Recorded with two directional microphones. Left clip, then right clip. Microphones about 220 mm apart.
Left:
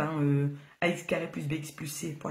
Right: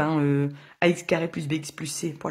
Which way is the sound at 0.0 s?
40° right (ahead or behind).